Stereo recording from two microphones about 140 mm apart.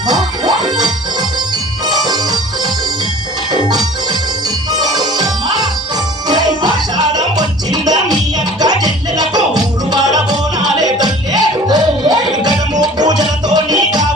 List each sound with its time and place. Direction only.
0.1 s music: 30° right (ahead or behind)
3.5 s organ: 30° right (ahead or behind)
4.8 s music: 30° right (ahead or behind)